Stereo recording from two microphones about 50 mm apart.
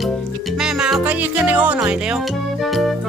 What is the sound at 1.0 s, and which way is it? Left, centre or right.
Music, right.